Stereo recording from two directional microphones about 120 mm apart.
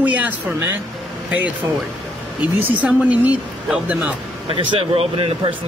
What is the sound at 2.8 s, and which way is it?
Speech, 10° right (ahead or behind).